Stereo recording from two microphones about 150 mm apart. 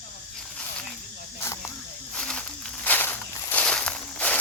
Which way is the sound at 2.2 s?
5° left (ahead or behind).